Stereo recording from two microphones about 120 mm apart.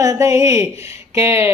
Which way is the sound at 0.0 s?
30° right (ahead or behind).